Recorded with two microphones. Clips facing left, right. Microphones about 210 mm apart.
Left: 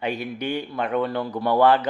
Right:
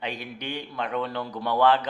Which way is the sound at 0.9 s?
55° left (ahead or behind).